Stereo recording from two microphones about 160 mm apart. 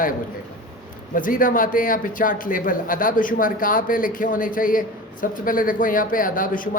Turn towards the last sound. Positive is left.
turn(degrees=60)  # may be behind; listen again after turning